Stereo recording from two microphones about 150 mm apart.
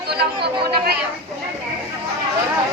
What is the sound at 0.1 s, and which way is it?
Speech, 90° right.